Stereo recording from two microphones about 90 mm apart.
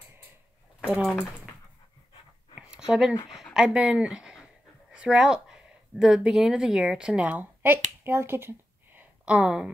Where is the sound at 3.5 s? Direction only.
5° right (ahead or behind).